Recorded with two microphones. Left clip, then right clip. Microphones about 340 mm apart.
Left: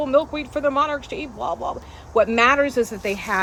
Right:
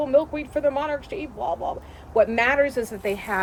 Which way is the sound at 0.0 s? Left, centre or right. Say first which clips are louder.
Left 1 dB; left.